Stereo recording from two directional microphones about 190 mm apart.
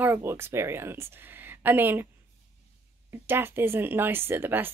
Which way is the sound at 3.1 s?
10° right (ahead or behind).